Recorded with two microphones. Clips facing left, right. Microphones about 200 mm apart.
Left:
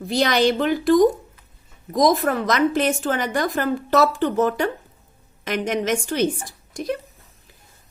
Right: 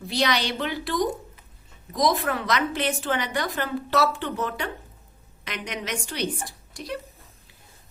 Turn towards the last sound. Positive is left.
turn(degrees=45)  # may be behind; listen again after turning